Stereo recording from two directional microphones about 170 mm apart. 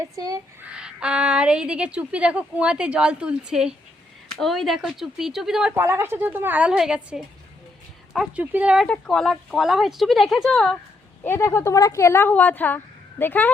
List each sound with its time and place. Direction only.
0.2 s speech: 20° right (ahead or behind)
0.6 s a woman's voice: 5° right (ahead or behind)
5.8 s a woman's voice: 15° right (ahead or behind); by 10.8 s 5° left (ahead or behind)
11.2 s a woman's voice: 15° left (ahead or behind)